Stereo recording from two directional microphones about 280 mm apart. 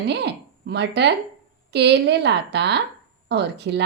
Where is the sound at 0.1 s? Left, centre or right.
Right.